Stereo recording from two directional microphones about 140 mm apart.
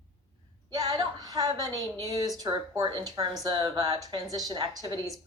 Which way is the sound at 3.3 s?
30° right (ahead or behind).